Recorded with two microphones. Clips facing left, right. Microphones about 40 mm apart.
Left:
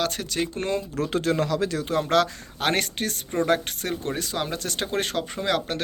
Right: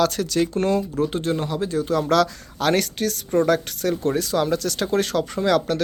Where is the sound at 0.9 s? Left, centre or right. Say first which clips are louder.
Right 1 dB; left.